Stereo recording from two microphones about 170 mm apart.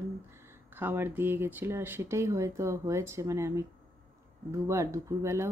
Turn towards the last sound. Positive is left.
turn(degrees=-15)  # may be behind; listen again after turning